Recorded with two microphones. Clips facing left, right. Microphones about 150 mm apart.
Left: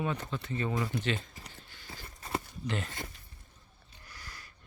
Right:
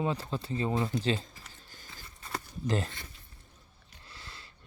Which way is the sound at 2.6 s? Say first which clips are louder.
Right 10 dB; 35° right (ahead or behind).